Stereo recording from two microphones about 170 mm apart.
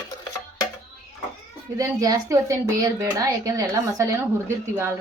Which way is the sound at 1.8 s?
20° right (ahead or behind).